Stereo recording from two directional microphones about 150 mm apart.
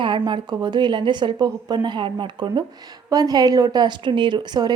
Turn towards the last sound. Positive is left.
turn(degrees=-30)  # may be behind; listen again after turning